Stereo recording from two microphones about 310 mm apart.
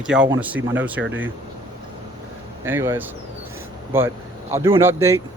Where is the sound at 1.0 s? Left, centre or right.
Right.